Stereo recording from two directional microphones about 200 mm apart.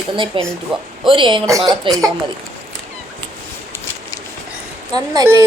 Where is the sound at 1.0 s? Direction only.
25° right (ahead or behind).